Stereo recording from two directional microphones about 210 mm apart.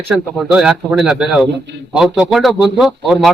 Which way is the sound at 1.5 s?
55° right (ahead or behind).